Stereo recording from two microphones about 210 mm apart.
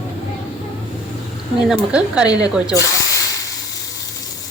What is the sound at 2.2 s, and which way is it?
Speech, 20° left (ahead or behind).